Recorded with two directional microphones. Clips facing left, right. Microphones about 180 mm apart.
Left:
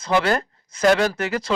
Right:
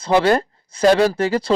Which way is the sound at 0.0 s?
30° right (ahead or behind).